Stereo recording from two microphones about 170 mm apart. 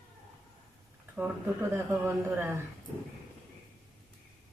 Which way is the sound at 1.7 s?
15° right (ahead or behind).